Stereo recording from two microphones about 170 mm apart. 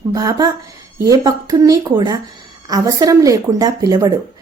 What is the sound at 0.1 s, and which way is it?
Speech, 20° right (ahead or behind).